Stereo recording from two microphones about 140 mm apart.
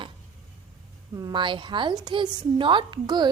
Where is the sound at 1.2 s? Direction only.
30° right (ahead or behind).